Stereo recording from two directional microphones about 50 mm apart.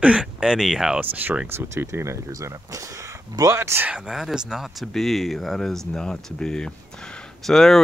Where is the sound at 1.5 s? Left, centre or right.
Right.